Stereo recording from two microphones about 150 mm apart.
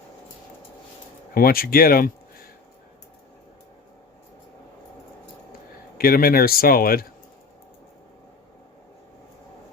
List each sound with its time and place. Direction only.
1.3 s speech: 75° left (ahead or behind)
6.0 s speech: 80° left